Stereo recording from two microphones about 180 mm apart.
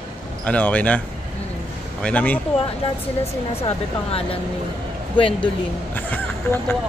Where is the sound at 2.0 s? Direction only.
10° left (ahead or behind).